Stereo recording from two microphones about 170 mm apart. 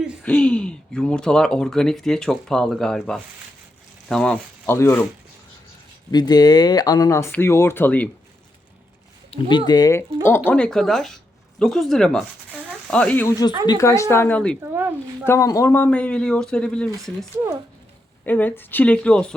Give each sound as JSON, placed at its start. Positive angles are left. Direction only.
{"t": 0.3, "sound": "speech", "side_deg": 5}
{"t": 6.1, "sound": "speech", "side_deg": 25}
{"t": 9.3, "sound": "speech", "side_deg": 25}
{"t": 10.2, "sound": "speech", "side_deg": 15}
{"t": 13.7, "sound": "speech", "side_deg": 20}
{"t": 14.6, "sound": "speech", "side_deg": -15}
{"t": 15.3, "sound": "speech", "side_deg": 20}
{"t": 18.3, "sound": "speech", "side_deg": 10}